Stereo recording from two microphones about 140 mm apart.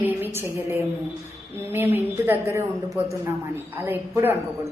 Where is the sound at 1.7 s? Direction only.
15° right (ahead or behind).